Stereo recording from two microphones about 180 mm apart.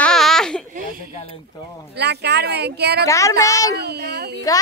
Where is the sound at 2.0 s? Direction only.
65° right (ahead or behind).